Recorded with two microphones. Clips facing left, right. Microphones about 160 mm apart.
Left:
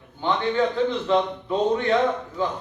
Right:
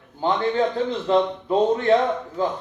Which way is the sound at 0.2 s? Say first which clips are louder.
Right 1 dB; 35° right (ahead or behind).